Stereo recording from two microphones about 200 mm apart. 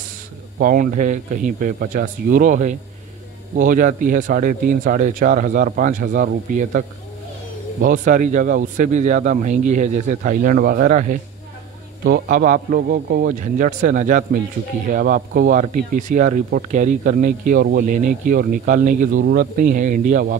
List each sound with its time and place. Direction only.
0.6 s speech: 45° right (ahead or behind)
7.8 s speech: 40° right (ahead or behind)